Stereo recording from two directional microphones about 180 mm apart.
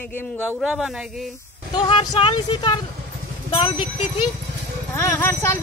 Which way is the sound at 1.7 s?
25° left (ahead or behind).